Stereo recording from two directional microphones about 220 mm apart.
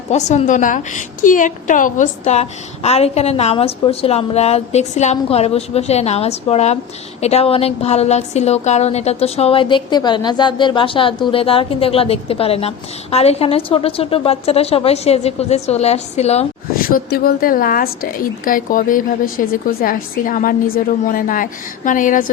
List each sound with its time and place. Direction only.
0.1 s a woman's voice: 30° left (ahead or behind)
16.8 s a woman's voice: 45° left (ahead or behind)